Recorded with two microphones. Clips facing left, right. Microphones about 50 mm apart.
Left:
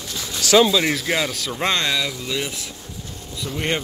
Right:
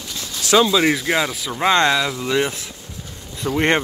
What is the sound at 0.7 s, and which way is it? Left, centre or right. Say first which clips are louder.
Speech: right 3 dB; centre.